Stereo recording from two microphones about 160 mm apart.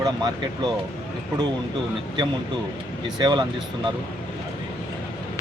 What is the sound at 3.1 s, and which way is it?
Speech, 25° right (ahead or behind).